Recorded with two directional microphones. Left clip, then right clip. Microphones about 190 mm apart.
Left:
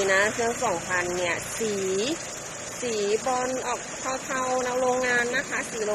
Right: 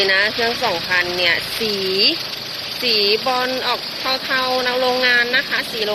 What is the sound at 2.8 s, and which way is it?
Speech, centre (ahead or behind).